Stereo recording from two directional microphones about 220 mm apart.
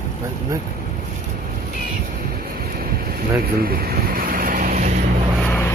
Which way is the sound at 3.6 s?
40° right (ahead or behind).